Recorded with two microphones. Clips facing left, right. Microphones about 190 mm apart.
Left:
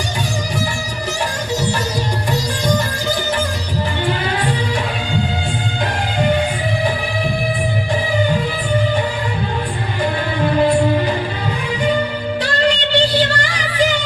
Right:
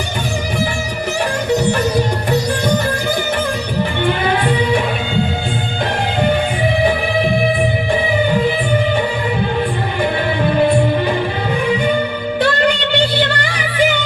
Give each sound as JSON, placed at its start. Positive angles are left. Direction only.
{"t": 1.5, "sound": "music", "side_deg": -60}
{"t": 4.0, "sound": "music", "side_deg": -60}
{"t": 12.4, "sound": "music", "side_deg": -55}